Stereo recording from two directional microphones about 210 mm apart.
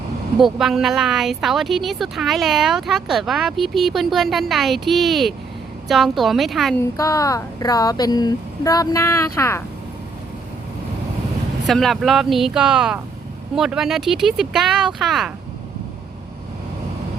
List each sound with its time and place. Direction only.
0.3 s speech: centre (ahead or behind)
6.7 s speech: 15° left (ahead or behind)
11.6 s speech: centre (ahead or behind)